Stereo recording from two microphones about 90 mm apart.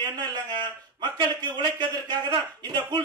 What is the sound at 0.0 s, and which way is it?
A man's voice, 55° right (ahead or behind).